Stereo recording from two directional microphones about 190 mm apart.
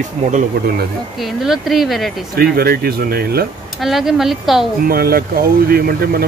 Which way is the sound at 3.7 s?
Centre (ahead or behind).